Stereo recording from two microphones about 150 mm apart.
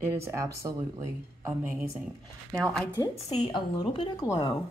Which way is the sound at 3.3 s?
35° left (ahead or behind).